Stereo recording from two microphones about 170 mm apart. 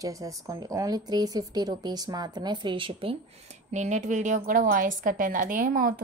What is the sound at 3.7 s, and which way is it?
A woman's voice, 45° right (ahead or behind).